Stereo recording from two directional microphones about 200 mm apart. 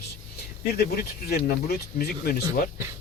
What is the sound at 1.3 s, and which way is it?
Speech, 50° left (ahead or behind).